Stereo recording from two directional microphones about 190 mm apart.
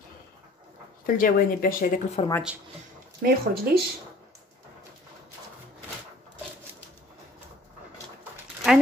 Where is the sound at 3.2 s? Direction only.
60° right (ahead or behind).